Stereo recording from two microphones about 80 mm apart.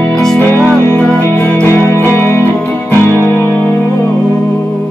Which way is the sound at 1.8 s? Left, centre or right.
Right.